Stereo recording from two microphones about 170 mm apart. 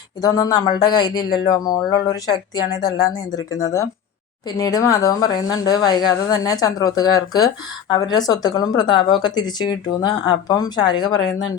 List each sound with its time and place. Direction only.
0.2 s speech: 20° left (ahead or behind)